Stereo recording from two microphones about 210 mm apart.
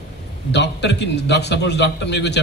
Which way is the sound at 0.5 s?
55° left (ahead or behind).